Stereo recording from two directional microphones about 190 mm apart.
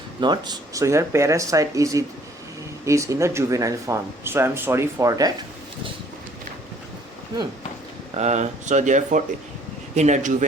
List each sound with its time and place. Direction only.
0.2 s speech: 20° right (ahead or behind)
8.2 s speech: 35° right (ahead or behind)